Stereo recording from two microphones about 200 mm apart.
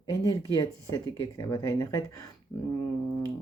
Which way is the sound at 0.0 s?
25° left (ahead or behind).